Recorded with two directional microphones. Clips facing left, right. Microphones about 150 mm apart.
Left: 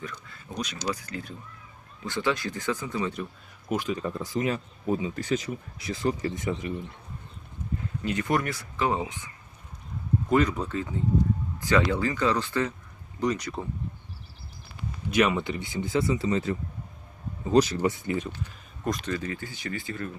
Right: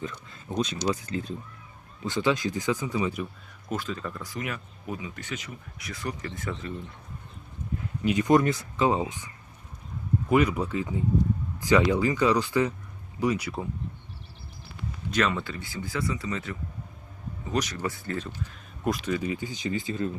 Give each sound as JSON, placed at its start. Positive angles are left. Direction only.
{"t": 0.0, "sound": "speech", "side_deg": -25}
{"t": 3.7, "sound": "speech", "side_deg": 15}
{"t": 8.0, "sound": "speech", "side_deg": -15}
{"t": 15.1, "sound": "speech", "side_deg": 10}
{"t": 18.9, "sound": "speech", "side_deg": -10}